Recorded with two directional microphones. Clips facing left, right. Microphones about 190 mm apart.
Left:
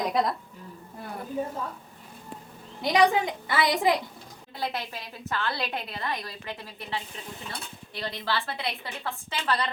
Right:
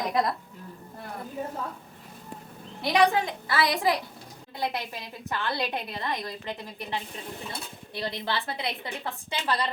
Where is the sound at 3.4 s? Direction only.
20° left (ahead or behind).